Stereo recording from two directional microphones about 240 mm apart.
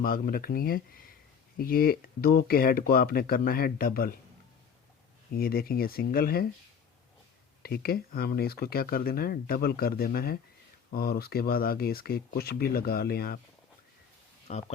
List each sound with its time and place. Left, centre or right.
0.0 s speech: left
5.3 s speech: left
7.6 s speech: left
14.5 s speech: left